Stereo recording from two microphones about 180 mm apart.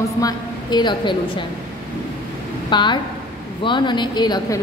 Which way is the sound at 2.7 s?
25° left (ahead or behind).